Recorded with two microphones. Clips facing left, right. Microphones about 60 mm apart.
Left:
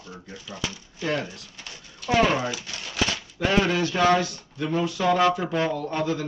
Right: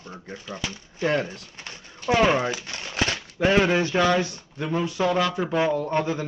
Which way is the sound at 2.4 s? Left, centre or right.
Right.